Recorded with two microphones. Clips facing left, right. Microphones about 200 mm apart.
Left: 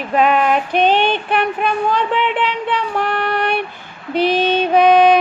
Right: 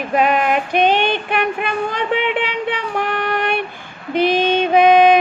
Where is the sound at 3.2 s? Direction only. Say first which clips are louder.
Left 1 dB; 50° right (ahead or behind).